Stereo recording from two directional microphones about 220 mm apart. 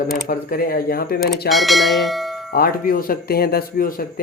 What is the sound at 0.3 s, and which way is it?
Speech, 40° left (ahead or behind).